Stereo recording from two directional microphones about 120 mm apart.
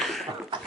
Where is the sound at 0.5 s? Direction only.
45° right (ahead or behind).